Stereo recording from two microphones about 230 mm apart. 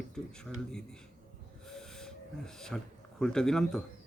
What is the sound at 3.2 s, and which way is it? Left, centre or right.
Speech, centre.